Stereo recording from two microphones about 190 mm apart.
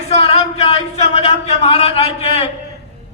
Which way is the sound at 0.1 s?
30° left (ahead or behind).